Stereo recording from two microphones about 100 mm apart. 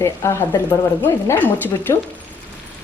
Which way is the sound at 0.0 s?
25° left (ahead or behind).